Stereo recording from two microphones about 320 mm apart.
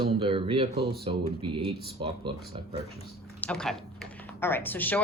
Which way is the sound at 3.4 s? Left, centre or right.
Centre.